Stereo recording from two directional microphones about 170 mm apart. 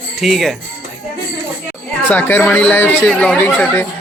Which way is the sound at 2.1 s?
10° left (ahead or behind).